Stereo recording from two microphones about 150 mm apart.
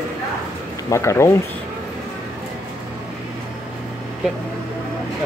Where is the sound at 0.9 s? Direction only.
20° left (ahead or behind).